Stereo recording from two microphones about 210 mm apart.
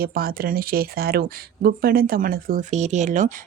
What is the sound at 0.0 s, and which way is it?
Speech, 45° right (ahead or behind).